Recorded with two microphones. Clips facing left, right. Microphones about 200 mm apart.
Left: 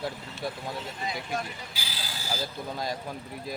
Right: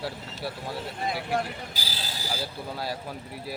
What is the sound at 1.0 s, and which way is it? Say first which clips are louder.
Speech: right 6 dB; 60° right (ahead or behind).